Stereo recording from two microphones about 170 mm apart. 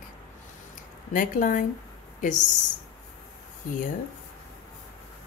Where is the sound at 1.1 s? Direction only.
50° left (ahead or behind).